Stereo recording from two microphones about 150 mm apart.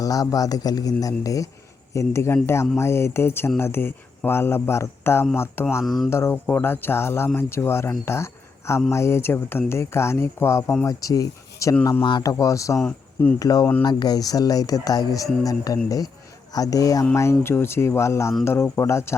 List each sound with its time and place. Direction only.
0.0 s speech: 25° left (ahead or behind)
5.8 s speech: centre (ahead or behind)
6.1 s speech: 15° left (ahead or behind)